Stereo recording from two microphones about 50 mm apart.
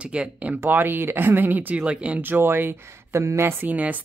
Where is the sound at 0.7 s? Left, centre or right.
Right.